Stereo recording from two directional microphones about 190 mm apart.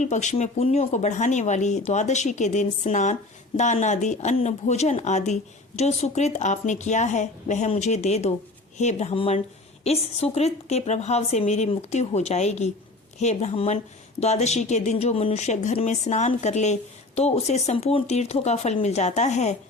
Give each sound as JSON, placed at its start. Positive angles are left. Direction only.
{"t": 0.0, "sound": "speech", "side_deg": 40}